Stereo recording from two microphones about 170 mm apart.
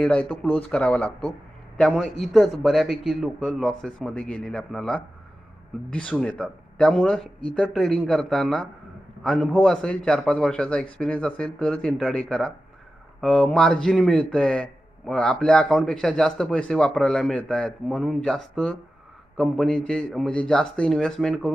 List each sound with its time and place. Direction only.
0.0 s a man's voice: 10° left (ahead or behind)